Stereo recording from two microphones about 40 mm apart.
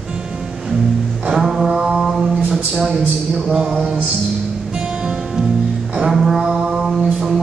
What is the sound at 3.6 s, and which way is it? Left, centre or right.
Music, right.